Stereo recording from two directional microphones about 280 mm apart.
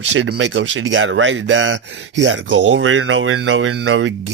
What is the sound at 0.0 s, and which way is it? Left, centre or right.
Speech, right.